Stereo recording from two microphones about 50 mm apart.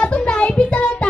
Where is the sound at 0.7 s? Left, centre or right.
Left.